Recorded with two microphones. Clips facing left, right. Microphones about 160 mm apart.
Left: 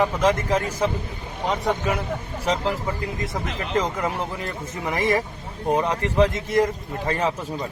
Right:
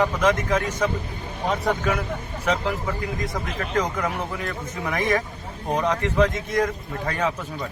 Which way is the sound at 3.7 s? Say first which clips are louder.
Left 1 dB; 25° left (ahead or behind).